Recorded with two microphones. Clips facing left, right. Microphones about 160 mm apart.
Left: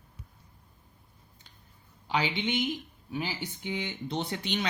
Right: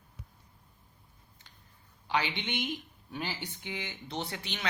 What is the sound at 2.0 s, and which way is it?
Speech, 10° left (ahead or behind).